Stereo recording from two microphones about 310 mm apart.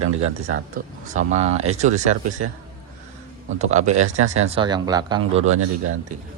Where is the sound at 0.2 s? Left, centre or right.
Right.